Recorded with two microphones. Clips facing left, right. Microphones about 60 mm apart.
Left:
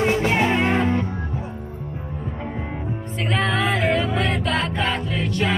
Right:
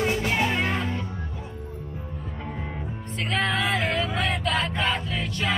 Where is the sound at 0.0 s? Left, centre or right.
Left.